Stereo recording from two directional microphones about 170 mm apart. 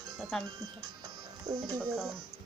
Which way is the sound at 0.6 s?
20° right (ahead or behind).